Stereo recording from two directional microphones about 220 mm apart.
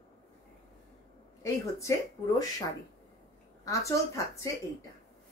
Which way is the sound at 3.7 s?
15° left (ahead or behind).